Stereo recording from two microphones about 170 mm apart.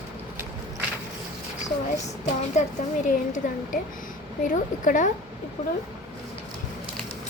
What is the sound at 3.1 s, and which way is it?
A woman's voice, 50° left (ahead or behind).